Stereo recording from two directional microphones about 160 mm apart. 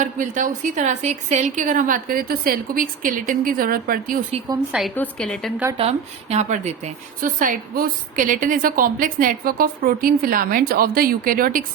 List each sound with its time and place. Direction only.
0.0 s a woman's voice: 55° right (ahead or behind)
4.9 s a woman's voice: 5° left (ahead or behind)
6.3 s a woman's voice: 45° right (ahead or behind); by 11.6 s 65° right (ahead or behind)